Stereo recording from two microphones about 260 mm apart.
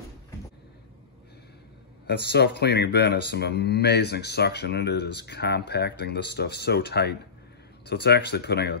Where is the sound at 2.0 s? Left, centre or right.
Left.